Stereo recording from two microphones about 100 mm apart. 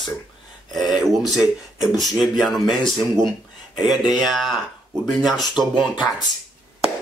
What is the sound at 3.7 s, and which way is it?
Speech, 45° left (ahead or behind).